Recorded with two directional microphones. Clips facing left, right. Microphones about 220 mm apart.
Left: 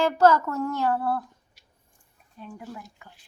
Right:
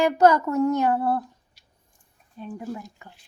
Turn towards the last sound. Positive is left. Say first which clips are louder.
# right 7 dB
turn(degrees=-25)  # may be behind; listen again after turning